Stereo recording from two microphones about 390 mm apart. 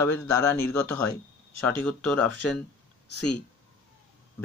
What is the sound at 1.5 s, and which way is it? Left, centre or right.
Speech, left.